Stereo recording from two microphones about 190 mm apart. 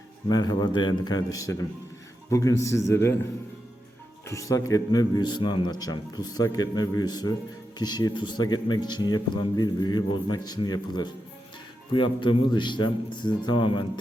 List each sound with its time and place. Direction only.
0.3 s a man's voice: 20° left (ahead or behind)
4.3 s a man's voice: 15° left (ahead or behind)